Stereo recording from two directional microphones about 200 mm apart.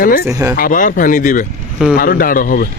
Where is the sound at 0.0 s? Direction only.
45° left (ahead or behind).